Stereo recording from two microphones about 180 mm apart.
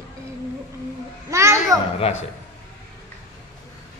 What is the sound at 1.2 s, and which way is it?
Children playing, 15° right (ahead or behind).